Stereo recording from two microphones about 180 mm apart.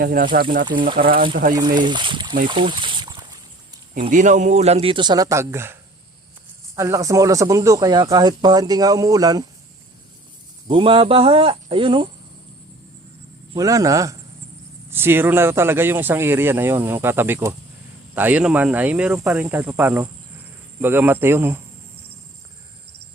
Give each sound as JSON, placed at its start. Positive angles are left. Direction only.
{"t": 0.0, "sound": "speech", "side_deg": -50}
{"t": 1.5, "sound": "speech", "side_deg": -25}
{"t": 2.5, "sound": "a sound", "side_deg": -25}
{"t": 4.1, "sound": "speech", "side_deg": -45}
{"t": 6.7, "sound": "speech", "side_deg": -15}
{"t": 10.7, "sound": "speech", "side_deg": -30}
{"t": 13.5, "sound": "speech", "side_deg": -20}